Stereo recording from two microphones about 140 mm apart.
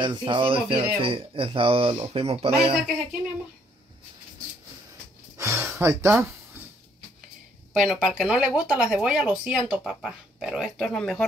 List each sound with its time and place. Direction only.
0.0 s speech: 35° right (ahead or behind)
5.4 s a sound: 20° right (ahead or behind)
7.7 s speech: centre (ahead or behind)